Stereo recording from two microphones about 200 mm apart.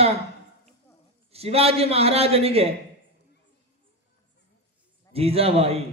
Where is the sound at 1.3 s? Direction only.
30° right (ahead or behind).